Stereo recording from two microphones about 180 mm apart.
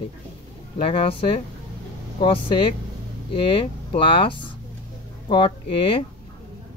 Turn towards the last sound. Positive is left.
turn(degrees=30)  # may be behind; listen again after turning